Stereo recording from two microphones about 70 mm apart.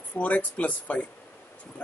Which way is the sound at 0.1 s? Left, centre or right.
Left.